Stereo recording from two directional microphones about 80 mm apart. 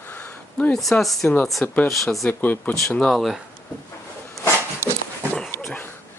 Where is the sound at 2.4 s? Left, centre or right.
Left.